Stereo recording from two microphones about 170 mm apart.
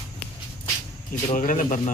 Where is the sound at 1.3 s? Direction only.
50° left (ahead or behind).